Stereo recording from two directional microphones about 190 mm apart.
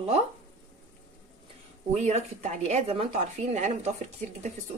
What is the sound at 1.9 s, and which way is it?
Speech, 35° right (ahead or behind).